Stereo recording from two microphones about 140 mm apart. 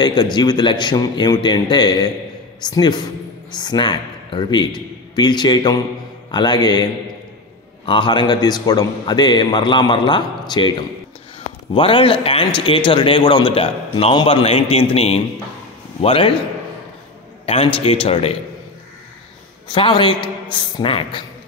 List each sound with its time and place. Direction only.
0.0 s a man's voice: 30° left (ahead or behind)
11.7 s a man's voice: 40° left (ahead or behind)
17.5 s a man's voice: 40° left (ahead or behind)
19.7 s a man's voice: 35° left (ahead or behind)